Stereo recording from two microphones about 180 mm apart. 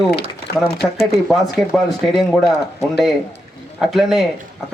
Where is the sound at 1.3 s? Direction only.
Centre (ahead or behind).